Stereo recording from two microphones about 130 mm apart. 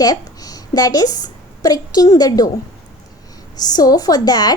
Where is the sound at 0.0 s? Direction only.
30° left (ahead or behind).